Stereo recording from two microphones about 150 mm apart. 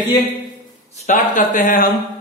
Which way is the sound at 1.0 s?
60° left (ahead or behind).